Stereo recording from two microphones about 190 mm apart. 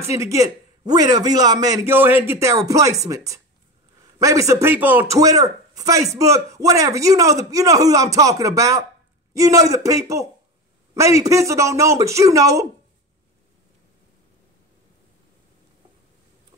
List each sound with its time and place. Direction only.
0.0 s a man's voice: 15° right (ahead or behind)